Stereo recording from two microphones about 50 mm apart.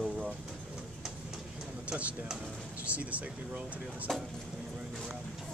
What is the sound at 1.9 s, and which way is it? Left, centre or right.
Speech, right.